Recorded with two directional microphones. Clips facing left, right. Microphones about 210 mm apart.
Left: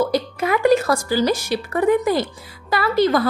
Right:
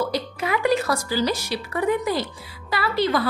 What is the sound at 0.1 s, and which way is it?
A woman's voice, 45° left (ahead or behind).